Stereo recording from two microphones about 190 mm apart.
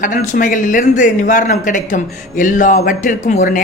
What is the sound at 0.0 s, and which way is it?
Speech, 40° left (ahead or behind).